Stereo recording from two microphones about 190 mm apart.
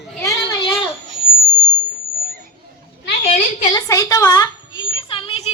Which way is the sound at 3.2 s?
35° left (ahead or behind).